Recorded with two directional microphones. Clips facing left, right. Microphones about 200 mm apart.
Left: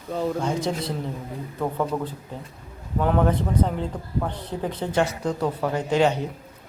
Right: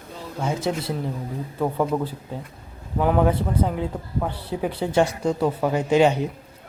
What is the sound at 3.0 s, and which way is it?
Speech, 10° right (ahead or behind).